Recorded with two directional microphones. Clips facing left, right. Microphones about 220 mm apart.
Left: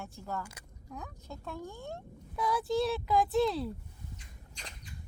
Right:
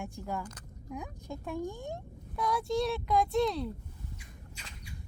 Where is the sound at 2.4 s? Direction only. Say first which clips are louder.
Even; centre (ahead or behind).